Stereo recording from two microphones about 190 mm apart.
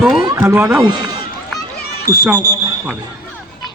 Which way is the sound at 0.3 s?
10° right (ahead or behind).